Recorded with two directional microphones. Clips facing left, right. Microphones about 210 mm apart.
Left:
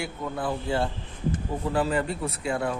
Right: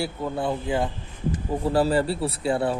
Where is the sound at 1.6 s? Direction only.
35° right (ahead or behind).